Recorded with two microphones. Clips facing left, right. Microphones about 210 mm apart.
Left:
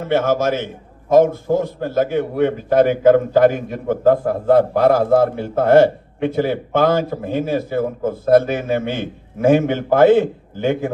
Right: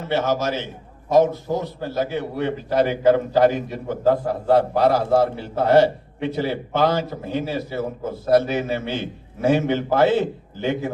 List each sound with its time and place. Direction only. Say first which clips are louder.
0.1 s a man's voice: left 5 dB; 50° left (ahead or behind)